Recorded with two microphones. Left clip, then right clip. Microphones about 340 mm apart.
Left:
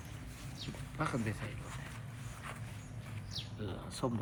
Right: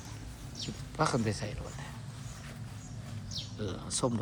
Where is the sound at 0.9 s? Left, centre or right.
Centre.